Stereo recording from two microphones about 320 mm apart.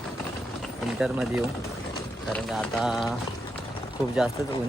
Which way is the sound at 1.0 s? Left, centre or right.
Centre.